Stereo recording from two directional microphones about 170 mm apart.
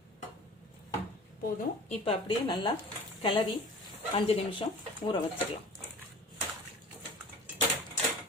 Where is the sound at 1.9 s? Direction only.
35° left (ahead or behind).